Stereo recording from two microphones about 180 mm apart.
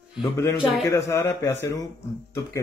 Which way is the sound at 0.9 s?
15° left (ahead or behind).